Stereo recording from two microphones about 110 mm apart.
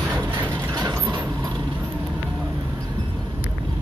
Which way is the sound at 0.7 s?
30° right (ahead or behind).